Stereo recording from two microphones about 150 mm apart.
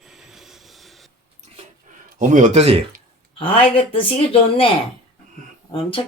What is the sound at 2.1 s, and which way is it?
Speech, 60° right (ahead or behind).